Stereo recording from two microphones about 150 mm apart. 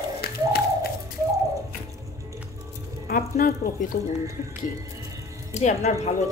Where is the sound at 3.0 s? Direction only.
75° left (ahead or behind).